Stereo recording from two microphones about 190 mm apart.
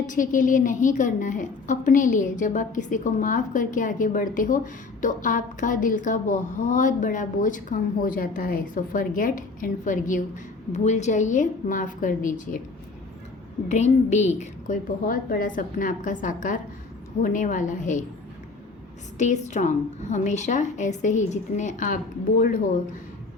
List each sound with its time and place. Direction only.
0.0 s a woman's voice: 45° left (ahead or behind)
13.7 s a woman's voice: 35° left (ahead or behind)
19.2 s a woman's voice: 40° left (ahead or behind)